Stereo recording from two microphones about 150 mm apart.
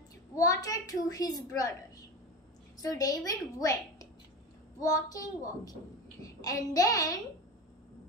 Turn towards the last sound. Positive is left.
turn(degrees=25)  # may be behind; listen again after turning